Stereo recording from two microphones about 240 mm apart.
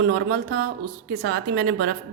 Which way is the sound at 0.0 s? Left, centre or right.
Right.